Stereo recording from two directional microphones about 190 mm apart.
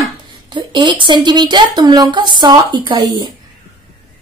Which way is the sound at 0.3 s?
25° right (ahead or behind).